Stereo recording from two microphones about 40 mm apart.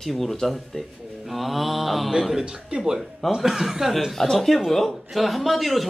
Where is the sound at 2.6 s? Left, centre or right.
Centre.